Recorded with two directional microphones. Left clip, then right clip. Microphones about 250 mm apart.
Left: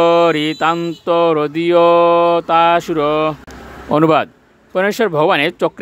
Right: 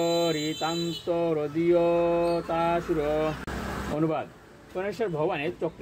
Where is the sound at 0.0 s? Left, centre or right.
Left.